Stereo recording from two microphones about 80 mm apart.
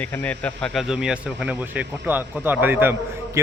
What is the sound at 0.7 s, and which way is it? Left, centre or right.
Speech, centre.